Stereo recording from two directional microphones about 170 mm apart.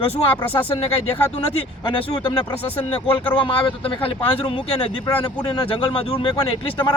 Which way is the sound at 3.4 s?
30° left (ahead or behind).